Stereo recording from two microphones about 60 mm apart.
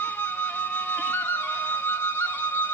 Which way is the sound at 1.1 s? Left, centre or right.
Left.